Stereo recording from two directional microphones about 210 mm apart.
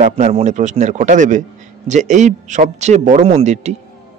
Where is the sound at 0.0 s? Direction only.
30° right (ahead or behind).